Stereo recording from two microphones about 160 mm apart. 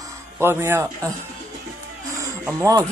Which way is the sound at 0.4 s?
15° right (ahead or behind).